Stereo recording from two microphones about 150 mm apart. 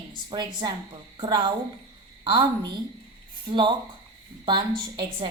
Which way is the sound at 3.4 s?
30° right (ahead or behind).